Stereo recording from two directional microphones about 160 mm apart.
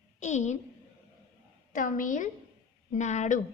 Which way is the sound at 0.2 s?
45° left (ahead or behind).